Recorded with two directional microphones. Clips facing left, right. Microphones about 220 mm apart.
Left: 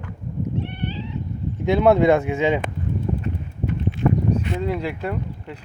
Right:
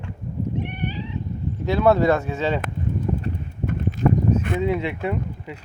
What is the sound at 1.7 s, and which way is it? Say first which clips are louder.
Speech: left 2 dB; 20° left (ahead or behind).